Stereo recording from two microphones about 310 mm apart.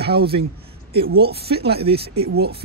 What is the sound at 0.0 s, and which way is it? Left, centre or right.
Speech, right.